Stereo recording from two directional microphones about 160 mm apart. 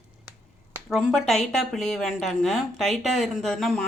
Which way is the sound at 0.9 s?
Centre (ahead or behind).